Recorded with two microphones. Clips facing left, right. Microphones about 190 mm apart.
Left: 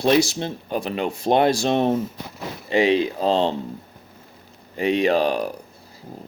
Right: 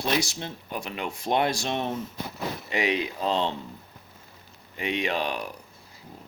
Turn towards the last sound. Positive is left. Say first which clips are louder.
# left 9 dB
turn(degrees=35)  # may be behind; listen again after turning